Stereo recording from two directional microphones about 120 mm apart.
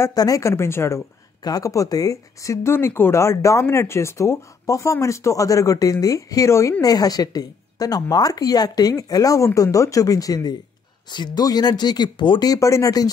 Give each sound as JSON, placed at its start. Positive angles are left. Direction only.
{"t": 0.0, "sound": "a woman's voice", "side_deg": 30}